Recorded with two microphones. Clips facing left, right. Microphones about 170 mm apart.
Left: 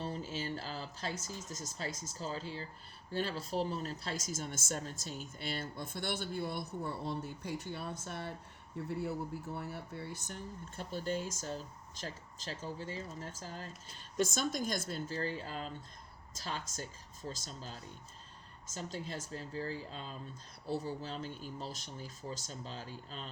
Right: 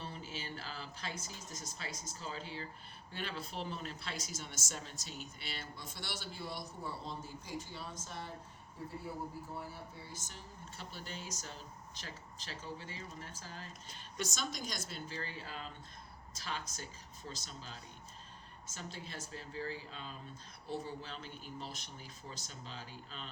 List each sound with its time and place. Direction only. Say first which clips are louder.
0.0 s a woman's voice: left 6 dB; 40° left (ahead or behind)